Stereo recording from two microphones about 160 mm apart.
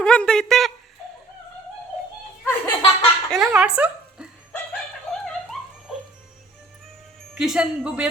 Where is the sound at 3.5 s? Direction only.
5° right (ahead or behind).